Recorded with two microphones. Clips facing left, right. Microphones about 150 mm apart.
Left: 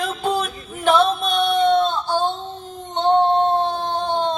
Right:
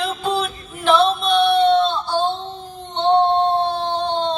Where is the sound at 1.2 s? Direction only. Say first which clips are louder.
Right 3 dB; 50° left (ahead or behind).